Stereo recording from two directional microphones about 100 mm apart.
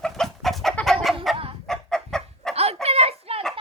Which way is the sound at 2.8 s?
90° right.